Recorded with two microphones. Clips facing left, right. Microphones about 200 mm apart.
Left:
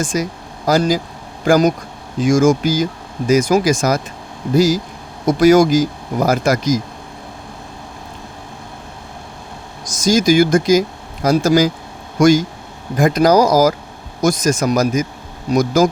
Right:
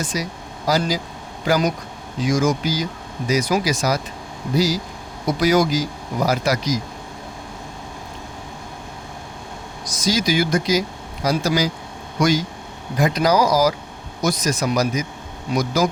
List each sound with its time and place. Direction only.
0.0 s speech: 50° left (ahead or behind)
9.8 s speech: 45° left (ahead or behind)